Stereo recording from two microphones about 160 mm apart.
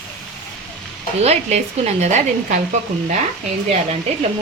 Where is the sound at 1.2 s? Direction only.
40° right (ahead or behind).